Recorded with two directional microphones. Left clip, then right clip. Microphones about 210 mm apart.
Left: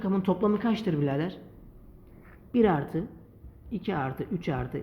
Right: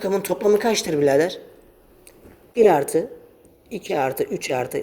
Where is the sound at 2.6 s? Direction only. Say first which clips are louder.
Right 10 dB; 25° right (ahead or behind).